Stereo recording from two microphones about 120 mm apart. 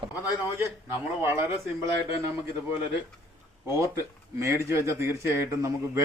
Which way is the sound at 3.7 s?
25° right (ahead or behind).